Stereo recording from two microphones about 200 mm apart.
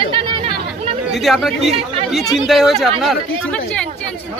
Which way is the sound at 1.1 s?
Centre (ahead or behind).